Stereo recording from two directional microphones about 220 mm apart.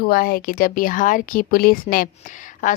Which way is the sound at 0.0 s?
40° left (ahead or behind).